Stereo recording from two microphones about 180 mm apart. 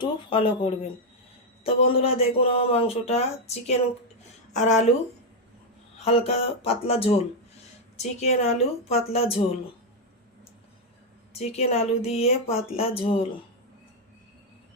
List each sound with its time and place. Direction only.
0.0 s speech: 30° left (ahead or behind)
6.1 s speech: 35° left (ahead or behind)
11.3 s speech: 35° left (ahead or behind)